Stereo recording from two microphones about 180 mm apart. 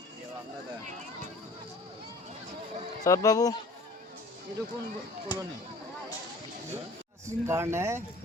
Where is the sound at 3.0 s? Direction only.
20° left (ahead or behind).